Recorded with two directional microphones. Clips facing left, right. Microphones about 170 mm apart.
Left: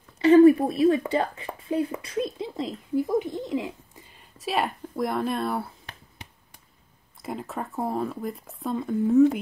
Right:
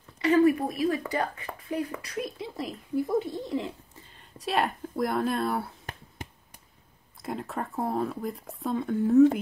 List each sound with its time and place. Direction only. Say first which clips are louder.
0.2 s a woman's voice: left 7 dB; 30° left (ahead or behind)
4.4 s speech: even; centre (ahead or behind)
6.2 s a sound: right 6 dB; 45° right (ahead or behind)
7.2 s speech: even; centre (ahead or behind)